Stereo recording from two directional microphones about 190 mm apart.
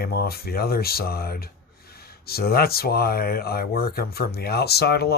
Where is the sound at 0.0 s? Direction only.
55° left (ahead or behind).